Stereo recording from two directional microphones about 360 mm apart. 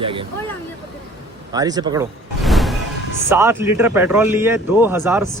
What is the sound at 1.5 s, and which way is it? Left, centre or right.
Music, centre.